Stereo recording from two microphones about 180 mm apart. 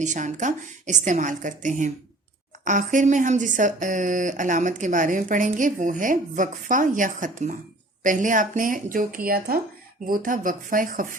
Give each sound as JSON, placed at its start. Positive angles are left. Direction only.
{"t": 0.0, "sound": "speech", "side_deg": -40}